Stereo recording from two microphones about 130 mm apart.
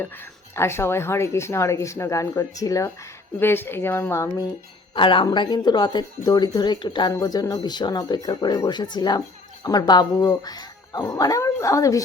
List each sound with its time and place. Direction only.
0.0 s speech: 20° left (ahead or behind)
4.9 s speech: 40° left (ahead or behind); by 12.0 s 25° left (ahead or behind)